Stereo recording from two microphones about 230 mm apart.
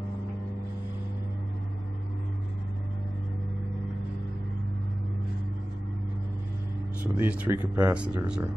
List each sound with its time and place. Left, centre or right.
7.0 s speech: centre